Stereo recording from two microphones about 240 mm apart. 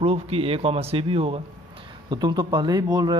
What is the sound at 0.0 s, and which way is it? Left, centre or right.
Speech, right.